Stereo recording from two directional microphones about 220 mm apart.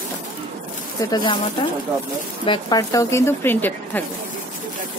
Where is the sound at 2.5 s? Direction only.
20° left (ahead or behind).